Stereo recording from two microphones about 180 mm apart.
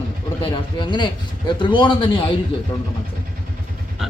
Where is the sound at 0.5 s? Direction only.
25° left (ahead or behind).